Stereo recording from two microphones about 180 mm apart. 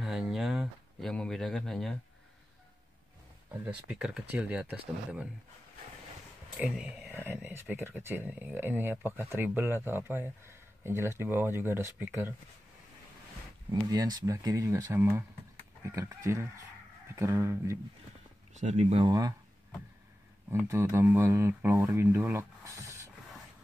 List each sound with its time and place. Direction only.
0.0 s speech: centre (ahead or behind)
3.5 s speech: 10° right (ahead or behind)
6.6 s speech: 5° right (ahead or behind)
13.7 s speech: 20° right (ahead or behind)
18.5 s speech: 40° right (ahead or behind)
19.0 s speech: 20° right (ahead or behind)
20.6 s speech: 15° right (ahead or behind)